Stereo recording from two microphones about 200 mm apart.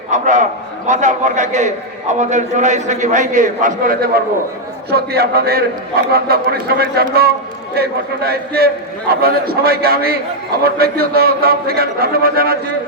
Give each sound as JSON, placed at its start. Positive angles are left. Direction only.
{"t": 0.1, "sound": "a man's voice", "side_deg": -35}